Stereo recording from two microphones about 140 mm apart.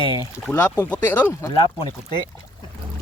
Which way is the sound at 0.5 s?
15° left (ahead or behind).